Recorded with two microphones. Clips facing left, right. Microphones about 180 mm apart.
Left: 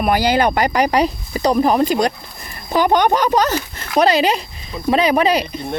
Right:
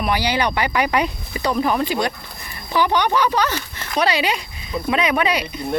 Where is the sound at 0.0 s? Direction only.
45° left (ahead or behind).